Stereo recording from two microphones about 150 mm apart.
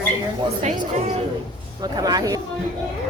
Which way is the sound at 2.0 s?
25° right (ahead or behind).